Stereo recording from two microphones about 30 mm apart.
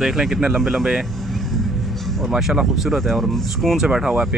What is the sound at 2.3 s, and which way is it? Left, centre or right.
Speech, centre.